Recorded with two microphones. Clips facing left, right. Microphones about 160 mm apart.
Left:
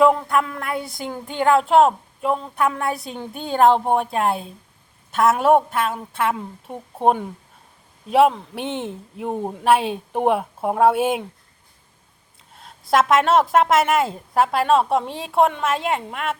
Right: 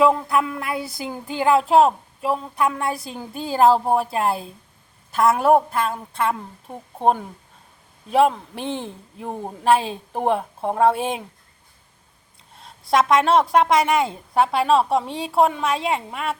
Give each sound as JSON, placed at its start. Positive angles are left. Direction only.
{"t": 0.3, "sound": "a woman's voice", "side_deg": -5}
{"t": 8.6, "sound": "speech", "side_deg": -35}
{"t": 9.1, "sound": "a woman's voice", "side_deg": 0}
{"t": 12.5, "sound": "a woman's voice", "side_deg": 0}